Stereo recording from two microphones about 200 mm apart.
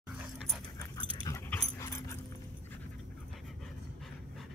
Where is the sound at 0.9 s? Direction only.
20° left (ahead or behind).